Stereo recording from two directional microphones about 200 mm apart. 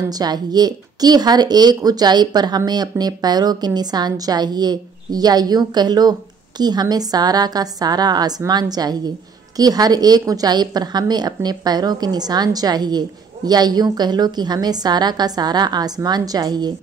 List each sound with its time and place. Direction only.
0.1 s speech: 20° right (ahead or behind)